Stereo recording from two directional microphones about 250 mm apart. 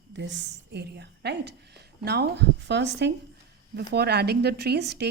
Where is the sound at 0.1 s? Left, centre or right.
Right.